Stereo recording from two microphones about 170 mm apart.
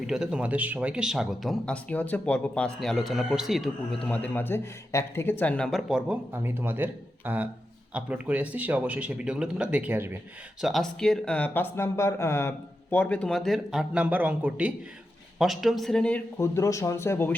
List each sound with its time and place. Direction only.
0.1 s speech: 5° right (ahead or behind)
10.6 s a man's voice: centre (ahead or behind)